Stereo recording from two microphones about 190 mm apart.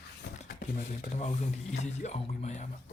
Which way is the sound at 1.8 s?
35° left (ahead or behind).